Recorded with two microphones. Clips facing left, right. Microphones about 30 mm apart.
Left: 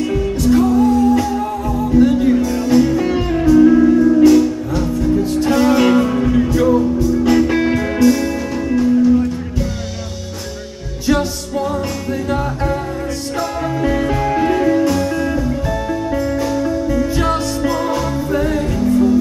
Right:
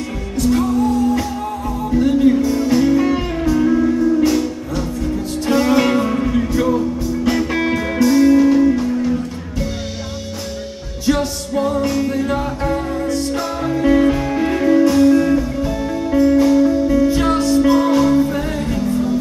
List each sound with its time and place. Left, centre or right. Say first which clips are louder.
0.4 s music: left 2 dB; centre
11.1 s music: left 1 dB; centre